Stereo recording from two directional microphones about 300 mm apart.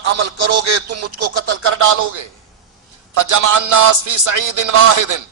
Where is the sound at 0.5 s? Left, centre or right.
Right.